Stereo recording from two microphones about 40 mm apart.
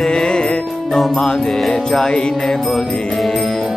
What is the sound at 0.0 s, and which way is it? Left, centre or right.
Music, left.